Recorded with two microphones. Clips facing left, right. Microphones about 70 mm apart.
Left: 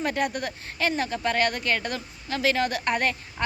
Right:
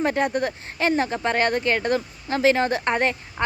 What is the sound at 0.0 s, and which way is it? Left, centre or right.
Speech, right.